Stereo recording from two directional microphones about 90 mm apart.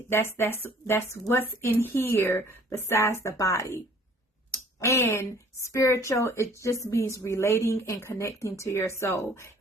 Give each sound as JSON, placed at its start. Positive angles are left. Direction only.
{"t": 0.1, "sound": "speech", "side_deg": 25}
{"t": 4.8, "sound": "speech", "side_deg": 30}